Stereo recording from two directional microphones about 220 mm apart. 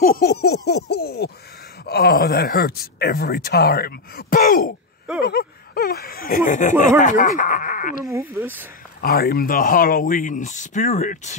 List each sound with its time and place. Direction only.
0.0 s speech: 45° left (ahead or behind)
8.0 s speech: 10° right (ahead or behind)
9.0 s speech: 45° left (ahead or behind)